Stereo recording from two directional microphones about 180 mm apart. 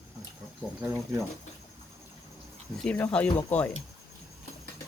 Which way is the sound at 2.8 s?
5° left (ahead or behind).